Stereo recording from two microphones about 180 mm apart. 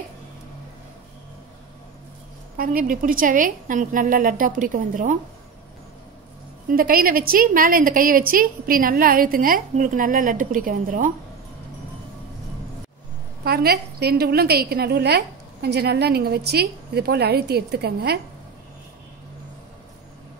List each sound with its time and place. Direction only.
2.5 s a woman's voice: 50° right (ahead or behind)
6.7 s a woman's voice: 55° right (ahead or behind)
13.4 s a woman's voice: 60° right (ahead or behind)